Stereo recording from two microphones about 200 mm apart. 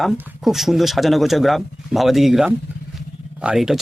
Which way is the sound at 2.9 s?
5° right (ahead or behind).